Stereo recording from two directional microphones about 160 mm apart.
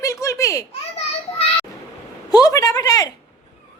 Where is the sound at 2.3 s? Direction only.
20° left (ahead or behind).